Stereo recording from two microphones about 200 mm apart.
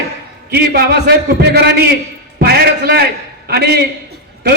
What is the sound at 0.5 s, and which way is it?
A man's voice, 55° right (ahead or behind).